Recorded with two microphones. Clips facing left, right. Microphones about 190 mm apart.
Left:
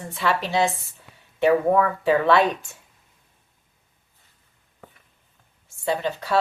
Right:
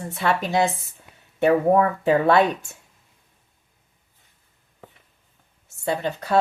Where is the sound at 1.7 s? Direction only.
40° right (ahead or behind).